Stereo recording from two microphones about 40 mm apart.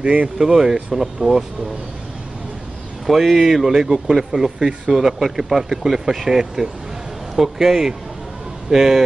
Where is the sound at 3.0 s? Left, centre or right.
Centre.